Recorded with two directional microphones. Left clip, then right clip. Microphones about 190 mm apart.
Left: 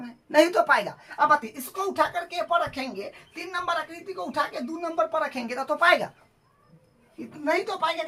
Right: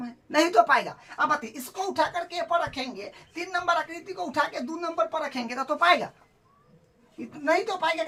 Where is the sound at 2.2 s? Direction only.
10° right (ahead or behind).